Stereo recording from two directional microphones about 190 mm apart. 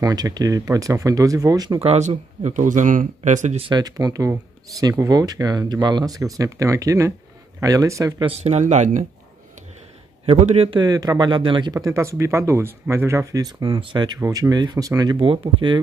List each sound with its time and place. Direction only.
0.0 s a man's voice: 20° right (ahead or behind)
1.9 s a man's voice: 35° right (ahead or behind); by 8.3 s 20° right (ahead or behind)
8.3 s speech: 35° right (ahead or behind)
10.2 s a man's voice: 35° right (ahead or behind)